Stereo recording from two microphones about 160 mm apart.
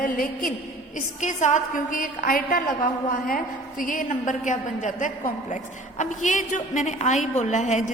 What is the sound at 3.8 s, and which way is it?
A woman's voice, 55° left (ahead or behind).